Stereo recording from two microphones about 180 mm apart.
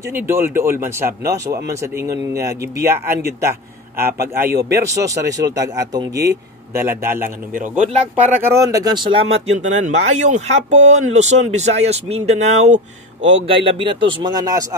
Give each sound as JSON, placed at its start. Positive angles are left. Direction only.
{"t": 0.1, "sound": "speech", "side_deg": -15}
{"t": 4.6, "sound": "a man's voice", "side_deg": -60}
{"t": 4.8, "sound": "speech", "side_deg": -20}
{"t": 8.4, "sound": "speech", "side_deg": -15}
{"t": 13.5, "sound": "speech", "side_deg": -30}